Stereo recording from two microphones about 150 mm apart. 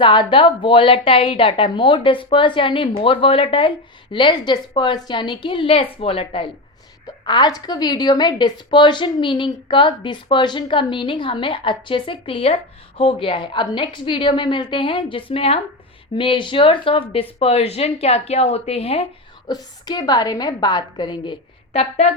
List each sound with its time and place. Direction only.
0.0 s a woman's voice: 35° left (ahead or behind)
19.5 s a woman's voice: 25° left (ahead or behind)
21.7 s a woman's voice: 45° left (ahead or behind)